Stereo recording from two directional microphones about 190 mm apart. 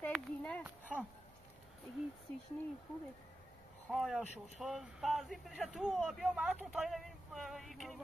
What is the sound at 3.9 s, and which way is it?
Speech, centre (ahead or behind).